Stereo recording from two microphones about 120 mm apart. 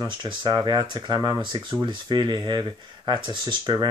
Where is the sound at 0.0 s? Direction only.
40° right (ahead or behind).